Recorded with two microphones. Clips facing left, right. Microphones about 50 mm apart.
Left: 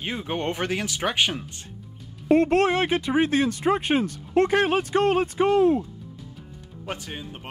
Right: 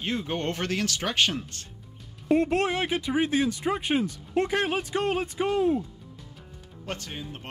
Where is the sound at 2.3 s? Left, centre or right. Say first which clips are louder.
Left 4 dB; left.